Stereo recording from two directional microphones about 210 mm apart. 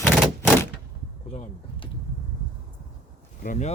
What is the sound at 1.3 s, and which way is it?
Speech, 25° left (ahead or behind).